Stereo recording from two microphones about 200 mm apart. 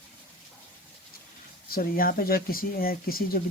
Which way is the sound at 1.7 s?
45° left (ahead or behind).